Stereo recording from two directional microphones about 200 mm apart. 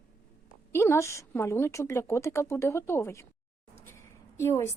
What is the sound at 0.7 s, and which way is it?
A woman's voice, 10° left (ahead or behind).